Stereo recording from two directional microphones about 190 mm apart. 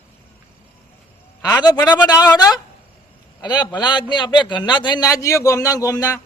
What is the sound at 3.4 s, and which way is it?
A man's voice, 20° left (ahead or behind).